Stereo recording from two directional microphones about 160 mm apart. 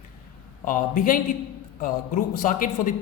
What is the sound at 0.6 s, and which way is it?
Speech, 55° left (ahead or behind).